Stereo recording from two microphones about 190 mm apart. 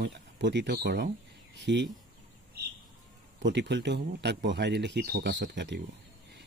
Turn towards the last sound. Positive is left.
turn(degrees=-65)  # may be behind; listen again after turning